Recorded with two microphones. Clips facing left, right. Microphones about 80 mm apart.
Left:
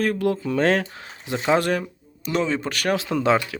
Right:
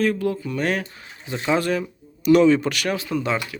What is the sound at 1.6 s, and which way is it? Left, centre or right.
Speech, left.